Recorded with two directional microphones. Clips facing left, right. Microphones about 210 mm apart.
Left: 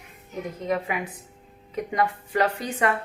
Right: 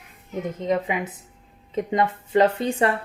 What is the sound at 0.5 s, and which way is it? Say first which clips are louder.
A woman's voice: right 3 dB; 20° right (ahead or behind).